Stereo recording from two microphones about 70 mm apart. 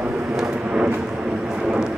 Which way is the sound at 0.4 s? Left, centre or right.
Centre.